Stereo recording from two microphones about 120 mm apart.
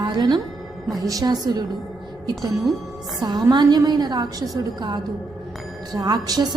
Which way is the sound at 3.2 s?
35° right (ahead or behind).